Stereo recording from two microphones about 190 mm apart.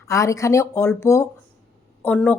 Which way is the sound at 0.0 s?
15° left (ahead or behind).